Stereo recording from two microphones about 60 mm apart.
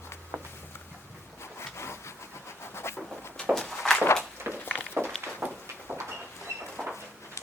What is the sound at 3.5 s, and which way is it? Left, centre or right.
Walk, centre.